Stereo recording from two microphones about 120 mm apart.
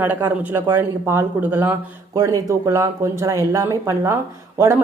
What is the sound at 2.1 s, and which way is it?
Speech, 30° right (ahead or behind).